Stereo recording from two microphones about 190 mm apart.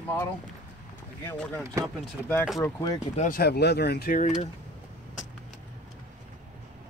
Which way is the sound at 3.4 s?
60° left (ahead or behind).